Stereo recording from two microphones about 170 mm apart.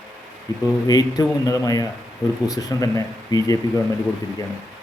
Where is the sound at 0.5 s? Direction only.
20° left (ahead or behind).